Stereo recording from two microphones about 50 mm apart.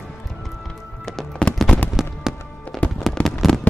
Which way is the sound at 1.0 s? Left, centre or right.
Centre.